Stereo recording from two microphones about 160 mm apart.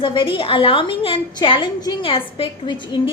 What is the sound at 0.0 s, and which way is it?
A woman's voice, 30° left (ahead or behind).